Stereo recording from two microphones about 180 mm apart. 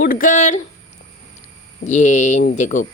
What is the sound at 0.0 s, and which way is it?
Speech, 50° left (ahead or behind).